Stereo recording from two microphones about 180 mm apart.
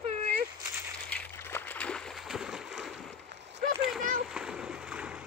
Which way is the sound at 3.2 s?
70° right (ahead or behind).